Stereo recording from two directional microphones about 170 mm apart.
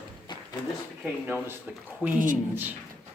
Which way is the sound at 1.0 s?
10° right (ahead or behind).